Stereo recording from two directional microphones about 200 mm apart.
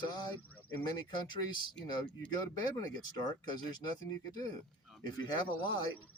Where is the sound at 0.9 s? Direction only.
20° left (ahead or behind).